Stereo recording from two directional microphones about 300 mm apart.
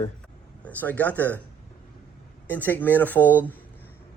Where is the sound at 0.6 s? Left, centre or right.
Centre.